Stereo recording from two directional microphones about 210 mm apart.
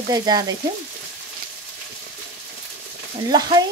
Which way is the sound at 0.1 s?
20° right (ahead or behind).